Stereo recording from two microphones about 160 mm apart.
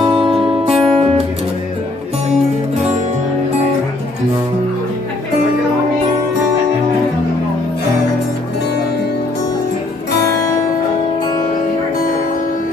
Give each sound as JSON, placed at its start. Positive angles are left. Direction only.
{"t": 0.0, "sound": "music", "side_deg": -35}